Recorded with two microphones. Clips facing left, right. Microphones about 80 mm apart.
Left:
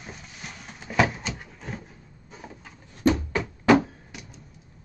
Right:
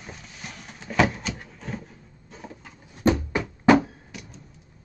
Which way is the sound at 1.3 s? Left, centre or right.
Centre.